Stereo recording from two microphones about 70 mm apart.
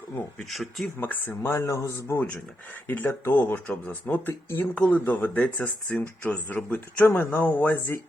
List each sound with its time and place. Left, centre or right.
0.5 s speech: centre
0.9 s speech: left
1.4 s a man's voice: left
2.8 s speech: left
4.3 s speech: left
4.7 s speech: left